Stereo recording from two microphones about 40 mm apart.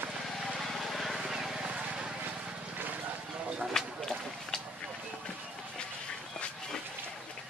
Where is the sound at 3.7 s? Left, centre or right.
Centre.